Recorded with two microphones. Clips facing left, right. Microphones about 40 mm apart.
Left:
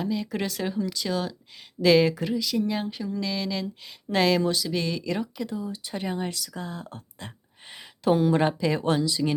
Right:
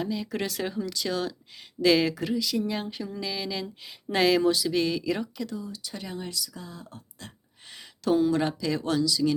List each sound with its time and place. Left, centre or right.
0.0 s speech: centre
5.4 s speech: left
7.7 s speech: left